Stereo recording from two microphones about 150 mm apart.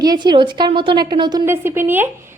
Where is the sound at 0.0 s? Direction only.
30° right (ahead or behind).